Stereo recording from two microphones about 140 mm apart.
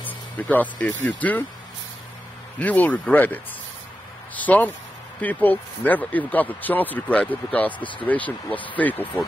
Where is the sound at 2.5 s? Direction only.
10° left (ahead or behind).